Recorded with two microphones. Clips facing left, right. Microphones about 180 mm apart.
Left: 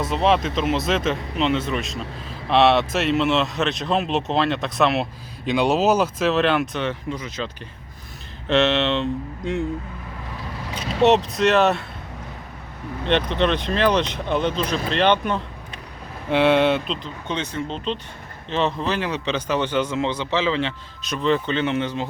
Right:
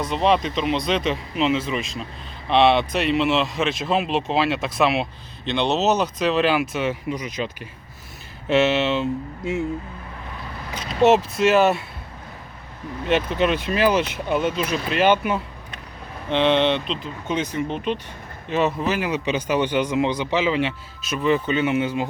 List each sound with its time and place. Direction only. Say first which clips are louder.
0.0 s speech: even; centre (ahead or behind)
5.5 s speech: left 2 dB; 10° left (ahead or behind)
11.0 s speech: right 1 dB; centre (ahead or behind)
13.1 s a man's voice: even; 5° right (ahead or behind)
16.3 s a man's voice: left 2 dB; 5° left (ahead or behind); by 22.0 s 10° right (ahead or behind)